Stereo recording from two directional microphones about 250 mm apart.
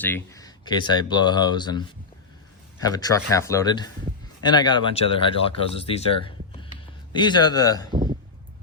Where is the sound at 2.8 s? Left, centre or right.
Centre.